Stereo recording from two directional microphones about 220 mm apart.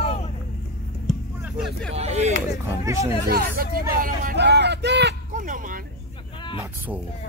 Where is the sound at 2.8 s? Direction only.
15° right (ahead or behind).